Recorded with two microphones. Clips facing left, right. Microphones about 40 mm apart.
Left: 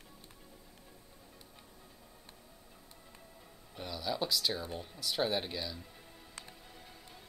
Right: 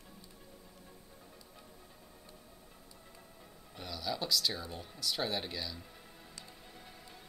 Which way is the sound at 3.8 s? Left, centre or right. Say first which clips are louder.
Left 2 dB; centre.